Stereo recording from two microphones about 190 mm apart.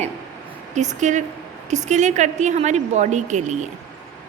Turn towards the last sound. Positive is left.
turn(degrees=-40)  # may be behind; listen again after turning